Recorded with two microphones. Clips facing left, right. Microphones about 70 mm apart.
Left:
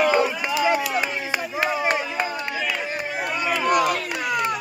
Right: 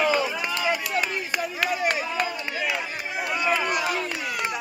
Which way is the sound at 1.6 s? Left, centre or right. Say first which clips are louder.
Left 3 dB; left.